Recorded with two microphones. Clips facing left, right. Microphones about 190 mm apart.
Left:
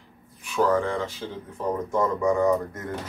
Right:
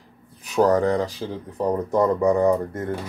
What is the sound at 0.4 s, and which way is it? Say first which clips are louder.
Speech: right 4 dB; 40° right (ahead or behind).